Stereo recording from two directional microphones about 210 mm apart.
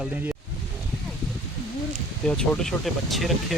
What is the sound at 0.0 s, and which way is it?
Speech, 10° right (ahead or behind).